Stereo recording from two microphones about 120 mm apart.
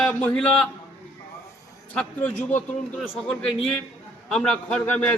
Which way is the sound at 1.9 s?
15° left (ahead or behind).